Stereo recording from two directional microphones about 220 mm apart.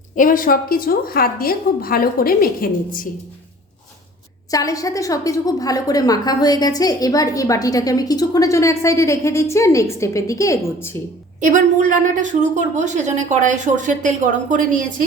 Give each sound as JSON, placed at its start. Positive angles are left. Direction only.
{"t": 0.2, "sound": "a woman's voice", "side_deg": 40}
{"t": 4.5, "sound": "a woman's voice", "side_deg": 15}
{"t": 11.3, "sound": "a woman's voice", "side_deg": -35}